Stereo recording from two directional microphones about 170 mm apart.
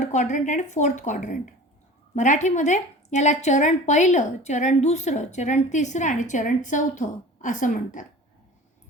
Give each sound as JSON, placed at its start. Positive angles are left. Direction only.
{"t": 0.0, "sound": "a woman's voice", "side_deg": 45}